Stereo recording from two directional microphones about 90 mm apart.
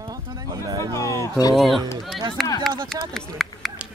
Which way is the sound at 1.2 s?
45° left (ahead or behind).